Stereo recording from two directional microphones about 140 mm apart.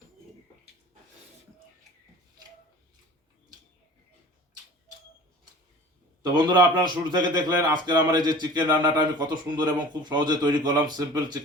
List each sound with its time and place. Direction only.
6.3 s speech: 30° right (ahead or behind)